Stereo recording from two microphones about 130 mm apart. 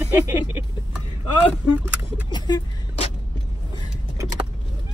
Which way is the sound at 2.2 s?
35° left (ahead or behind).